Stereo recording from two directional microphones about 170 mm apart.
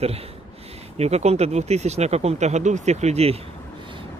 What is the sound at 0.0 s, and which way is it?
Speech, 35° right (ahead or behind).